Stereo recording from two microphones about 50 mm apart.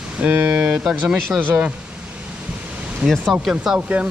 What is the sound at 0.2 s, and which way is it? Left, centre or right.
Speech, right.